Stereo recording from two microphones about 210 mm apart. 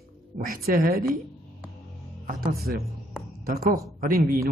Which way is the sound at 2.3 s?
45° right (ahead or behind).